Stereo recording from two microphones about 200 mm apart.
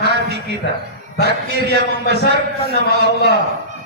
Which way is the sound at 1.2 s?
55° right (ahead or behind).